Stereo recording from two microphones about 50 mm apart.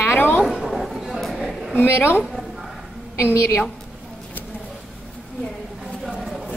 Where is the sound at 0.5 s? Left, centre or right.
Centre.